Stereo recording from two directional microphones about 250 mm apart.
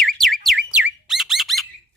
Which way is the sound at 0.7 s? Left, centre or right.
Centre.